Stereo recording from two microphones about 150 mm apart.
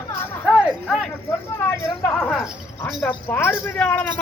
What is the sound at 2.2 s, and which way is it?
Speech, centre (ahead or behind).